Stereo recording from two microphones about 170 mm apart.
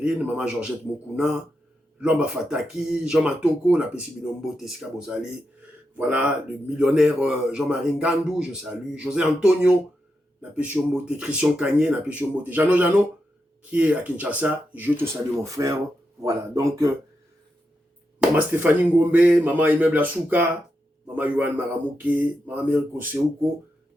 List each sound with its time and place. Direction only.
0.0 s speech: 5° right (ahead or behind)
2.0 s speech: 5° right (ahead or behind)
18.2 s speech: 10° right (ahead or behind)